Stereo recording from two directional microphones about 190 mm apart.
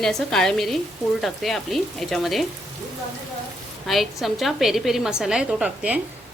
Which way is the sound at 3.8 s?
Centre (ahead or behind).